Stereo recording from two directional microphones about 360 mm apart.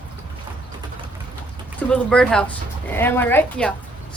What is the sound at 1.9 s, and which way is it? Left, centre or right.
Speech, centre.